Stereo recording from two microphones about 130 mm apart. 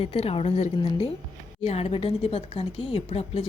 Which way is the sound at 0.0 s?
50° left (ahead or behind).